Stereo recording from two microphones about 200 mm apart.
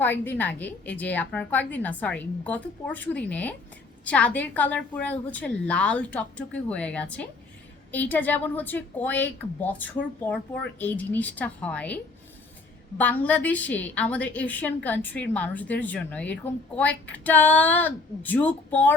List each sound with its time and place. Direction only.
0.0 s a woman's voice: 10° left (ahead or behind)
13.0 s a woman's voice: 10° left (ahead or behind)